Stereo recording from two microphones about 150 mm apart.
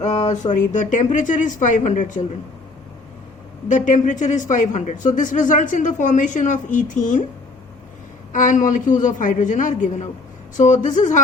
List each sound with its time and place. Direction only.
0.0 s speech: 50° left (ahead or behind)
3.7 s speech: 55° left (ahead or behind)
8.3 s speech: 60° left (ahead or behind)